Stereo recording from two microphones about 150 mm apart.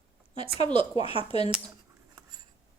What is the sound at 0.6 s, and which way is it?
Speech, 30° right (ahead or behind).